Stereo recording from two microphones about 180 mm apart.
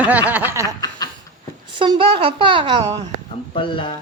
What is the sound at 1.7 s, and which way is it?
Speech, 30° right (ahead or behind).